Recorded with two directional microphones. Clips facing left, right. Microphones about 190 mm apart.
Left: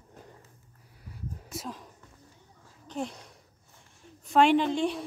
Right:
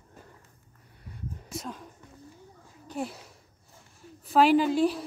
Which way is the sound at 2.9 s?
5° right (ahead or behind).